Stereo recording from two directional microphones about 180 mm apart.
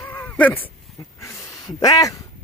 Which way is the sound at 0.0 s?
10° left (ahead or behind).